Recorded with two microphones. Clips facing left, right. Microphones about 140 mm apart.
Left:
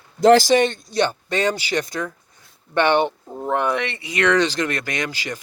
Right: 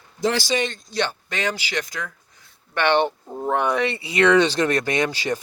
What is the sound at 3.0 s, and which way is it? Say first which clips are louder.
Speech: even; 5° right (ahead or behind).